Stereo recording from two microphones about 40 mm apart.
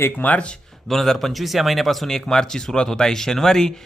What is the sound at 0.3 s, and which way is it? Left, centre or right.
Speech, left.